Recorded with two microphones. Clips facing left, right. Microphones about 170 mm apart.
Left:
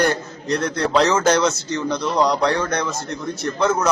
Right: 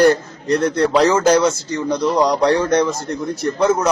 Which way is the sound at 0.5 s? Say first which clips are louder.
Right 4 dB; centre (ahead or behind).